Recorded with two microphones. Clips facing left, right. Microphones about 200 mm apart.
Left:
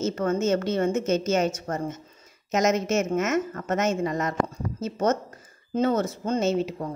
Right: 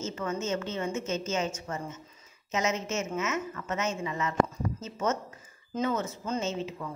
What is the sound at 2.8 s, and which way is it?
Speech, 80° left.